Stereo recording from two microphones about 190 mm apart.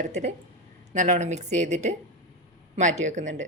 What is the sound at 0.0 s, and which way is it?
Speech, 40° right (ahead or behind).